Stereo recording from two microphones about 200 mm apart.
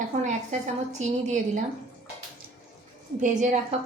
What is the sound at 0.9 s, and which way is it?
Speech, 35° right (ahead or behind).